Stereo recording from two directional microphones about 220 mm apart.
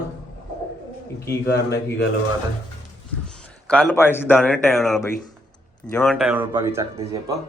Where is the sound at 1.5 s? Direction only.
45° left (ahead or behind).